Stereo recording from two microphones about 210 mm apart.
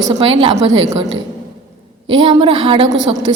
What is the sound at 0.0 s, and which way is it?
Speech, 25° right (ahead or behind).